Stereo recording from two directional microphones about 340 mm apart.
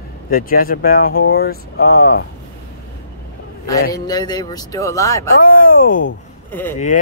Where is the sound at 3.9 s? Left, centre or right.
Centre.